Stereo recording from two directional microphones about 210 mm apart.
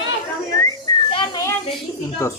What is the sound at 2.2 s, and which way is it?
Speech, 15° left (ahead or behind).